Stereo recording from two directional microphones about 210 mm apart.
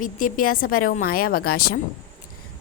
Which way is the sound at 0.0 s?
40° left (ahead or behind).